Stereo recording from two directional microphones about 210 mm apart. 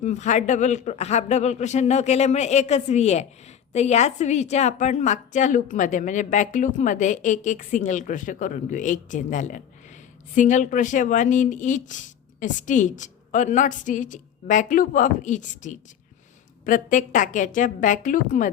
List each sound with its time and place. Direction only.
0.0 s speech: 35° left (ahead or behind)